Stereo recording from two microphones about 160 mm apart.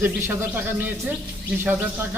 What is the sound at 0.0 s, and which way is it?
A man's voice, 15° right (ahead or behind).